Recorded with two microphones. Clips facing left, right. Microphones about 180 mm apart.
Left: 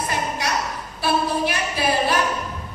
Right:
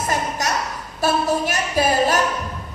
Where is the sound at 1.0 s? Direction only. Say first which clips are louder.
Right 2 dB; 45° right (ahead or behind).